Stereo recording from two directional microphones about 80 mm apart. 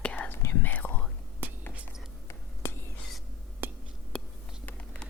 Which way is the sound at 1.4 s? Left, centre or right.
Right.